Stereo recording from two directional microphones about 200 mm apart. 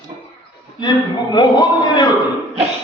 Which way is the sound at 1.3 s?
20° left (ahead or behind).